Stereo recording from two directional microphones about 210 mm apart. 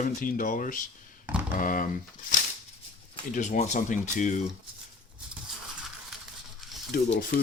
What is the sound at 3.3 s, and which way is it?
Speech, 35° left (ahead or behind).